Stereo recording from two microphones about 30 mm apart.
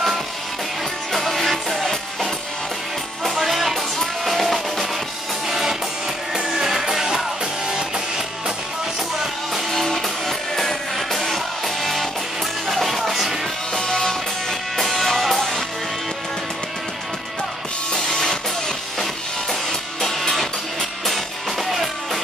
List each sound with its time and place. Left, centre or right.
1.1 s music: centre
3.3 s music: centre
5.5 s music: centre
9.7 s music: centre
13.7 s music: centre
17.9 s music: left
20.0 s music: centre